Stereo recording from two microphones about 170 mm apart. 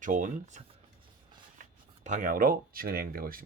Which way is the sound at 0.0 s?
50° right (ahead or behind).